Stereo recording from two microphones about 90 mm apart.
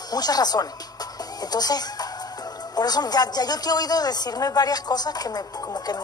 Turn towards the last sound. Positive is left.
turn(degrees=50)  # may be behind; listen again after turning